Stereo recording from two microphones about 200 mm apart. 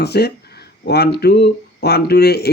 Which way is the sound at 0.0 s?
55° left (ahead or behind).